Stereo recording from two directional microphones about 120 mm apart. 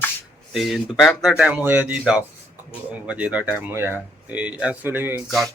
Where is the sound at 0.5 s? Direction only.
Centre (ahead or behind).